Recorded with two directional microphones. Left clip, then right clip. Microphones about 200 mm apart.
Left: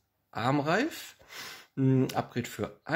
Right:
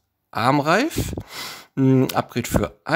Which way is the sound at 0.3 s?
40° right (ahead or behind).